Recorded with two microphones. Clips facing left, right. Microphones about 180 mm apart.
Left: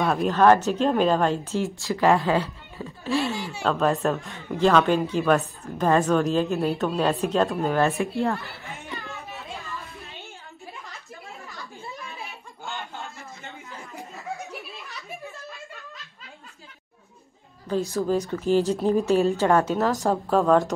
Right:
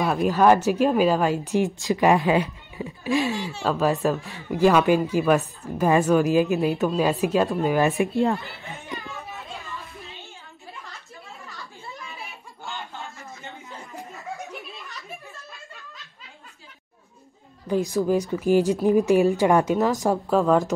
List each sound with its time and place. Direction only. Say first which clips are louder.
0.0 s a woman's voice: even; 5° right (ahead or behind)
3.6 s a woman's voice: even; 5° right (ahead or behind)
17.6 s a woman's voice: right 2 dB; 15° right (ahead or behind)